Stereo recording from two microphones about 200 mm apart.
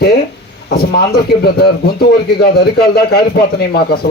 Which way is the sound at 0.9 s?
50° left (ahead or behind).